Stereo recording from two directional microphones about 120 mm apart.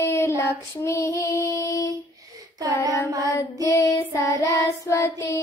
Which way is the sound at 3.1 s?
30° right (ahead or behind).